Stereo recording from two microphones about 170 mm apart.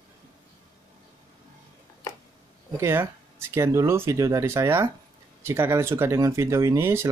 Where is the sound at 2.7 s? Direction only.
15° right (ahead or behind).